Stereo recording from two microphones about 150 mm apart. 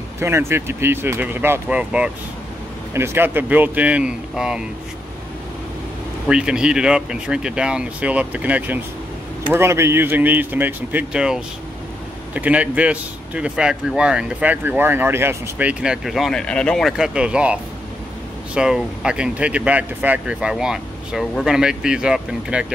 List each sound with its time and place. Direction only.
0.2 s speech: 15° right (ahead or behind)
6.2 s speech: 5° right (ahead or behind)